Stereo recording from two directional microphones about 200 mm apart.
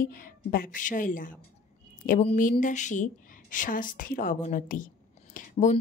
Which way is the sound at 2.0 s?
40° left (ahead or behind).